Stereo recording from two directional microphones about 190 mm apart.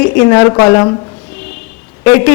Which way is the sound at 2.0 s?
15° left (ahead or behind).